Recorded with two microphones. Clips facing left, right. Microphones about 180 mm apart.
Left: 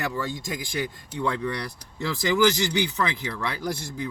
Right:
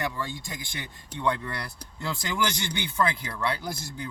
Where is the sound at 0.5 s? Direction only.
90° left.